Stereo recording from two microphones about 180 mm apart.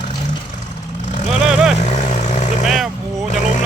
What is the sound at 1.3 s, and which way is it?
Vehicle, 5° right (ahead or behind).